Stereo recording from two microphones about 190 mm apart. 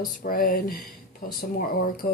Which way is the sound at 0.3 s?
50° left (ahead or behind).